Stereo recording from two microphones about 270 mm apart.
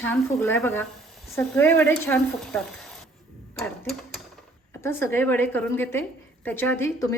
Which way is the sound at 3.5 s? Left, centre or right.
Centre.